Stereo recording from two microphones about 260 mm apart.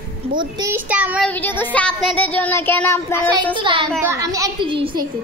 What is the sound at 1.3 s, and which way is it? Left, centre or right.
Child singing, centre.